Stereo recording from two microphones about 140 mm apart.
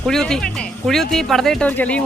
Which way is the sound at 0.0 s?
5° left (ahead or behind).